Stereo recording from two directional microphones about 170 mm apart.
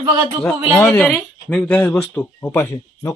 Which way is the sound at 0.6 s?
5° left (ahead or behind).